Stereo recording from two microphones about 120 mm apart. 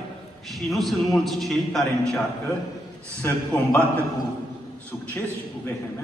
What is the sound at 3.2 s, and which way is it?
Speech, 15° left (ahead or behind).